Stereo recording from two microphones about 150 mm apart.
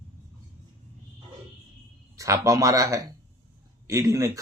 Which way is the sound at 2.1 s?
20° right (ahead or behind).